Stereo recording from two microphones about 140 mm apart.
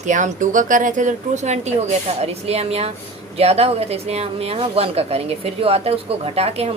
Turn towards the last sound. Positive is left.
turn(degrees=-50)  # may be behind; listen again after turning